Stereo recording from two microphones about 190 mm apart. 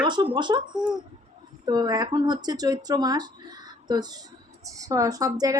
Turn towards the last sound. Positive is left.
turn(degrees=-20)  # may be behind; listen again after turning